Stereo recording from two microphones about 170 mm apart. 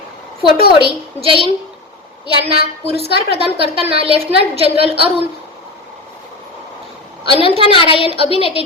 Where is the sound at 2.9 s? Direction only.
35° right (ahead or behind).